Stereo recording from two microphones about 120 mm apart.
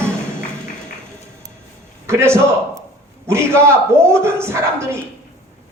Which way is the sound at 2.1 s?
20° right (ahead or behind).